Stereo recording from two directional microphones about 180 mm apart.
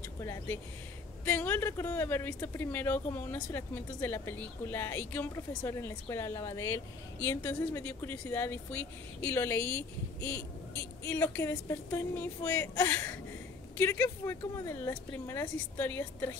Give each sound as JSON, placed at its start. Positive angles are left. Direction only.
{"t": 0.2, "sound": "speech", "side_deg": 15}